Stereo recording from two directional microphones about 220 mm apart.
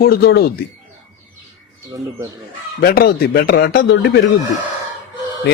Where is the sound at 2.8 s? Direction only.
45° left (ahead or behind).